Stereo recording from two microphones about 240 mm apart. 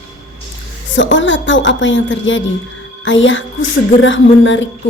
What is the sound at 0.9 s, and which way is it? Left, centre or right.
A woman's voice, left.